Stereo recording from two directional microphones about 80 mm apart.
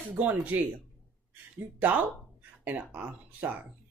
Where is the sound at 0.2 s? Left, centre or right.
Right.